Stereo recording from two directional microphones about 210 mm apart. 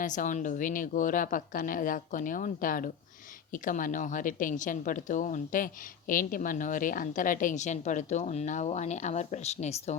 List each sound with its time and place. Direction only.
0.0 s a woman's voice: 35° left (ahead or behind)